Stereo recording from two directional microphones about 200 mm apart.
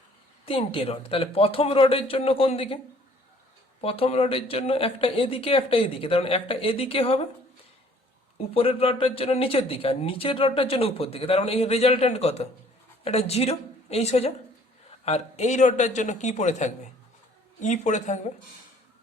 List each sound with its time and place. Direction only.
0.4 s speech: 25° left (ahead or behind)
3.8 s speech: 30° left (ahead or behind)
8.4 s a man's voice: 30° left (ahead or behind)